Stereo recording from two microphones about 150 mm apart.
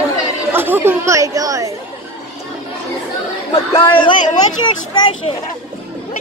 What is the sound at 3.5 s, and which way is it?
Speech, 40° left (ahead or behind).